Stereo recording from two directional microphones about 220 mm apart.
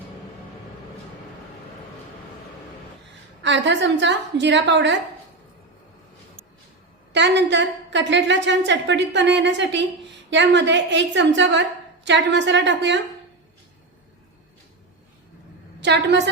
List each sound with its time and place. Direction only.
3.4 s a woman's voice: 55° right (ahead or behind)
7.1 s a woman's voice: 50° right (ahead or behind)
15.8 s a woman's voice: 50° right (ahead or behind)